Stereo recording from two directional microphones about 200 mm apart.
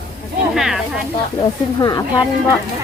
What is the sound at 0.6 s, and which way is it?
Speech, 5° right (ahead or behind).